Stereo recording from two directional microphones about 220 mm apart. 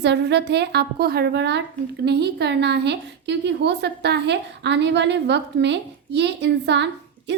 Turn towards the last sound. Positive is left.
turn(degrees=-50)  # may be behind; listen again after turning